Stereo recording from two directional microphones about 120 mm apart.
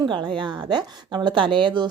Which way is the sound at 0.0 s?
40° right (ahead or behind).